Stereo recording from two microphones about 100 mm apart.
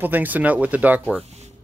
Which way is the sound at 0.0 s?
15° right (ahead or behind).